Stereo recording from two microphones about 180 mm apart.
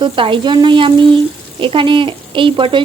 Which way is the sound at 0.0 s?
25° right (ahead or behind).